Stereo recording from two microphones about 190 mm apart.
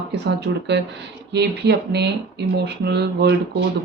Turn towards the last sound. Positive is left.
turn(degrees=-60)  # may be behind; listen again after turning